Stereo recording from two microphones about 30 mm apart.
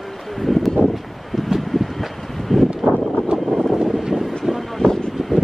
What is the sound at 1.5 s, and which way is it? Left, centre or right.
Vehicle, centre.